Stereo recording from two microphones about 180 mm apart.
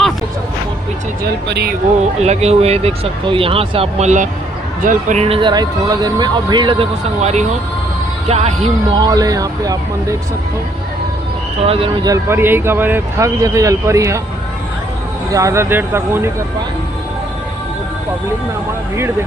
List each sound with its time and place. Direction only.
1.5 s speech: 65° right (ahead or behind)
2.2 s speech: 35° right (ahead or behind); by 10.2 s 20° right (ahead or behind)
11.6 s speech: 35° right (ahead or behind)
12.0 s speech: 15° right (ahead or behind)
15.3 s speech: 15° right (ahead or behind)